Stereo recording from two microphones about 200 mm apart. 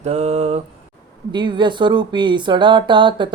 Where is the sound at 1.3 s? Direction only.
25° right (ahead or behind).